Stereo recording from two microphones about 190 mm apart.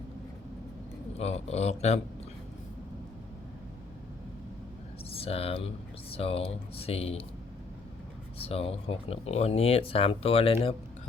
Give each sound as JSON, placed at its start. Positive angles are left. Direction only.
{"t": 1.2, "sound": "speech", "side_deg": 35}
{"t": 5.0, "sound": "speech", "side_deg": 30}
{"t": 8.4, "sound": "speech", "side_deg": 30}